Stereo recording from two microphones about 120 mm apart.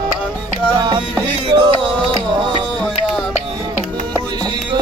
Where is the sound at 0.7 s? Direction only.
35° right (ahead or behind).